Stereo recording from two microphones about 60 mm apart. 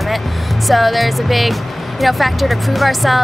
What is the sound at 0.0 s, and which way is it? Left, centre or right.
Speech, centre.